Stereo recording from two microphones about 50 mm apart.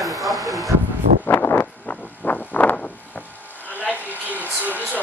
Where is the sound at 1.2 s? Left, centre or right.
Left.